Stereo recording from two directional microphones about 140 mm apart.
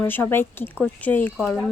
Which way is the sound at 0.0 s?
15° left (ahead or behind).